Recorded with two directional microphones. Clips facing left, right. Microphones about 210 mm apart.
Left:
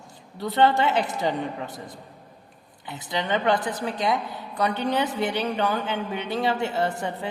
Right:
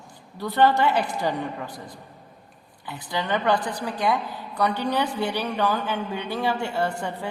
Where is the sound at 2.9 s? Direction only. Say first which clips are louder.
Even; 20° left (ahead or behind).